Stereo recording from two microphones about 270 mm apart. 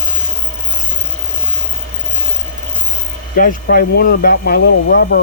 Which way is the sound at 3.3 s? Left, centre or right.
Left.